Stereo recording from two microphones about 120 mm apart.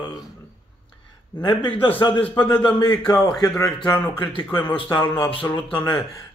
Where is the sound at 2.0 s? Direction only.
40° left (ahead or behind).